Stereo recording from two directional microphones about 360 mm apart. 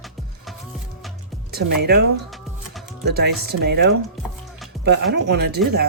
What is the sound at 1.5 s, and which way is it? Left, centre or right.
Speech, right.